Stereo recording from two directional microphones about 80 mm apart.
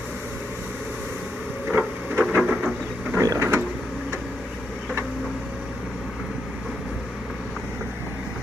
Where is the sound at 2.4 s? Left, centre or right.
Centre.